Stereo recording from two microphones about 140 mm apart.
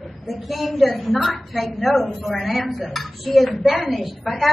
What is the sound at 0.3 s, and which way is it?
A man's voice, centre (ahead or behind).